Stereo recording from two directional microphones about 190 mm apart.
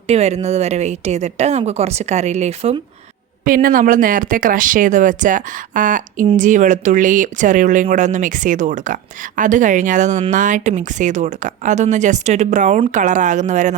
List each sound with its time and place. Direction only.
0.1 s speech: 35° right (ahead or behind)
3.4 s speech: 45° right (ahead or behind)